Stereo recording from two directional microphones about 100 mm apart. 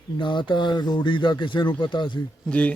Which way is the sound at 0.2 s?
55° left (ahead or behind).